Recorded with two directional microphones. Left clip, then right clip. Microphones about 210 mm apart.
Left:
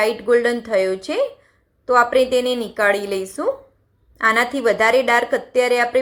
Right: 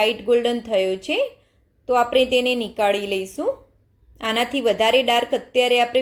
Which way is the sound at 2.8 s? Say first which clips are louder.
Left 3 dB; 25° left (ahead or behind).